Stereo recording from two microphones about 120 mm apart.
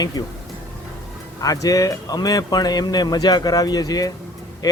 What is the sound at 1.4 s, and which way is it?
Speech, 30° left (ahead or behind).